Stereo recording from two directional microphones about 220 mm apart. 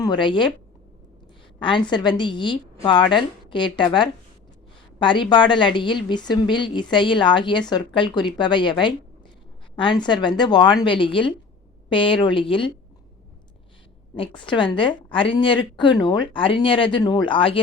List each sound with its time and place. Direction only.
0.0 s a woman's voice: 20° left (ahead or behind)
1.5 s a woman's voice: 20° left (ahead or behind)
4.9 s a woman's voice: 20° left (ahead or behind)
14.2 s a woman's voice: 20° left (ahead or behind)